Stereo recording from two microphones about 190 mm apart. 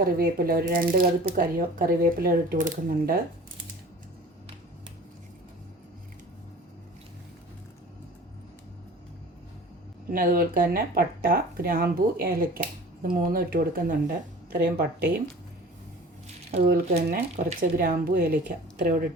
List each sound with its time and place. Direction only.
0.0 s speech: 50° right (ahead or behind)
10.1 s speech: 50° right (ahead or behind)
16.6 s speech: 55° right (ahead or behind)